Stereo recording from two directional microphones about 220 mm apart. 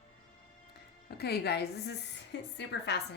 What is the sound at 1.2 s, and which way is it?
A woman's voice, 45° left (ahead or behind).